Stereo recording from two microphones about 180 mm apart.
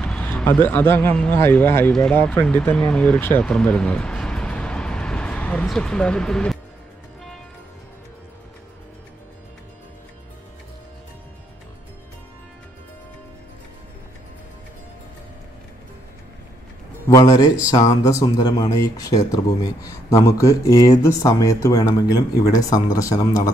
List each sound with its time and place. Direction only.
0.0 s speech: 10° left (ahead or behind)
17.1 s speech: 20° left (ahead or behind)